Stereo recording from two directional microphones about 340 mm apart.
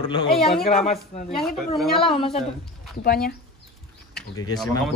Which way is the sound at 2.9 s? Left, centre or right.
Left.